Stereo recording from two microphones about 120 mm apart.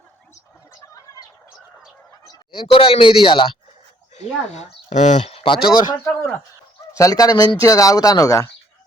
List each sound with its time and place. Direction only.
0.8 s chicken: 30° left (ahead or behind)
2.5 s a man's voice: 45° left (ahead or behind)
4.1 s speech: 70° left (ahead or behind); by 5.2 s 85° left
5.2 s a sound: 55° left (ahead or behind)
5.6 s speech: 35° left (ahead or behind)